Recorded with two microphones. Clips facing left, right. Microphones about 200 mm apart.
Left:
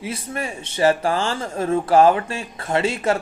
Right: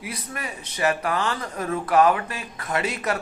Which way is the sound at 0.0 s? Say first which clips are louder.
Left 6 dB; 25° left (ahead or behind).